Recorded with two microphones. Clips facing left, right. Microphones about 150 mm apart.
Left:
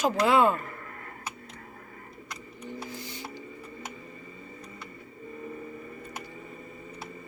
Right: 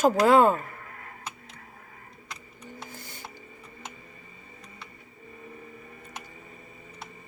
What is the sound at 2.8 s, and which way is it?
Mechanisms, 50° right (ahead or behind).